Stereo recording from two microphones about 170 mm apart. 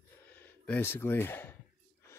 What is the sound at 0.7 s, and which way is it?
Speech, 10° left (ahead or behind).